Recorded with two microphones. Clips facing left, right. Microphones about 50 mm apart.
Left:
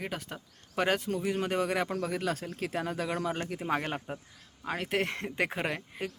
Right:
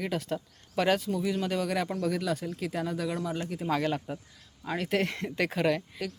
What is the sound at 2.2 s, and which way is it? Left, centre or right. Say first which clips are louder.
Speech: right 1 dB; left.